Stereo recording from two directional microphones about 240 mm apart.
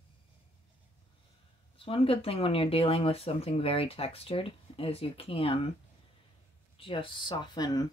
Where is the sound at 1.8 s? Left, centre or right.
Left.